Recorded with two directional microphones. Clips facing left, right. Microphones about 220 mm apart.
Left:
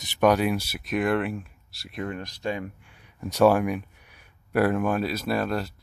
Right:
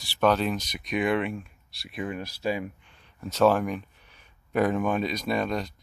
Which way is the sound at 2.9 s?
10° left (ahead or behind).